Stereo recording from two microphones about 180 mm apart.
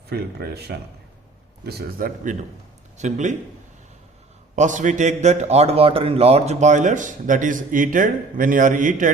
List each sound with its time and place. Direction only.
0.1 s speech: 65° right (ahead or behind)
3.0 s speech: 40° right (ahead or behind)
4.5 s a man's voice: 45° right (ahead or behind)